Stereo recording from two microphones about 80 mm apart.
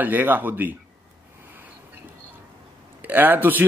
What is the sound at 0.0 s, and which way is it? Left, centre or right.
Speech, right.